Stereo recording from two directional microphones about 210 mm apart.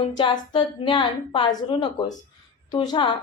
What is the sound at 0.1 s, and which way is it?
A woman's voice, 20° left (ahead or behind).